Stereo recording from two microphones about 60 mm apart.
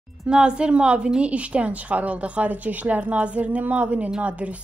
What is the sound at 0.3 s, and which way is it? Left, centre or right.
A woman's voice, centre.